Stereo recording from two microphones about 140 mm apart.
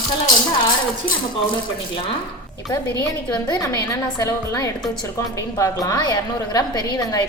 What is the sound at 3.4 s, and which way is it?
A woman's voice, 25° left (ahead or behind).